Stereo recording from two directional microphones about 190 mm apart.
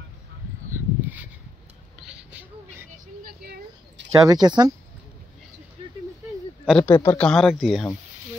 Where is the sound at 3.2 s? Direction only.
55° right (ahead or behind).